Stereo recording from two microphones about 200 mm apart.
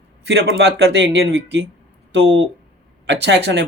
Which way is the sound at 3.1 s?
60° right (ahead or behind).